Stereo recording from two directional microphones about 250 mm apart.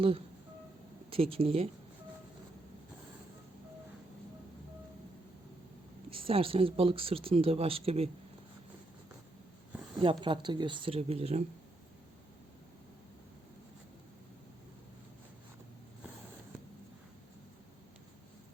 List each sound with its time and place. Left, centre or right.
1.1 s speech: right
6.1 s speech: right
10.0 s speech: centre